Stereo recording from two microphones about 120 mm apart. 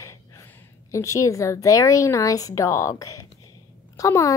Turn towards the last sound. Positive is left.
turn(degrees=25)  # may be behind; listen again after turning